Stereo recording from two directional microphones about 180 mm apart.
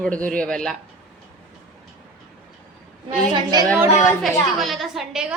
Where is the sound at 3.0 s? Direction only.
20° right (ahead or behind).